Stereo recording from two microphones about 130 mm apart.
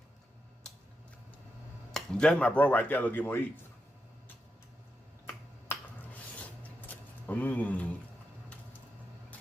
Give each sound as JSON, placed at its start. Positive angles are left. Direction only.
{"t": 2.0, "sound": "speech", "side_deg": 5}
{"t": 5.7, "sound": "finger snapping", "side_deg": 15}
{"t": 6.8, "sound": "a sound", "side_deg": 10}